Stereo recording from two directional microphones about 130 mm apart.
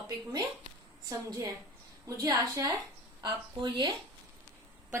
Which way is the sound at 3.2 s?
35° right (ahead or behind).